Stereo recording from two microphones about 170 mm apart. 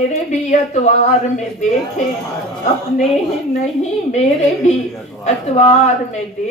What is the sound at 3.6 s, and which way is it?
Speech, 45° left (ahead or behind).